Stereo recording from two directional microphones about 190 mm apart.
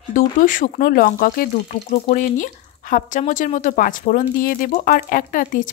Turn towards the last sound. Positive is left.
turn(degrees=45)  # may be behind; listen again after turning